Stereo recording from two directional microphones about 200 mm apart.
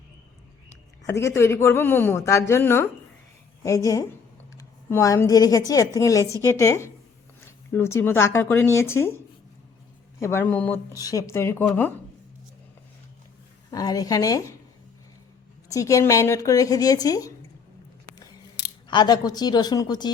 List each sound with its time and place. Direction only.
1.0 s a woman's voice: 15° left (ahead or behind)
7.4 s a sound: 10° left (ahead or behind)
7.9 s a woman's voice: 10° left (ahead or behind)
13.7 s a woman's voice: 20° left (ahead or behind)
15.7 s a woman's voice: 15° left (ahead or behind)
18.9 s speech: 20° left (ahead or behind)